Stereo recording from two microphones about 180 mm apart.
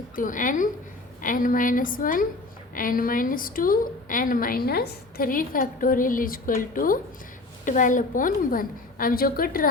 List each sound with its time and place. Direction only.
0.2 s a woman's voice: 45° left (ahead or behind)